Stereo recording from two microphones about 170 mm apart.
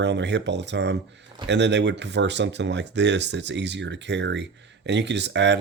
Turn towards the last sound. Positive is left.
turn(degrees=-90)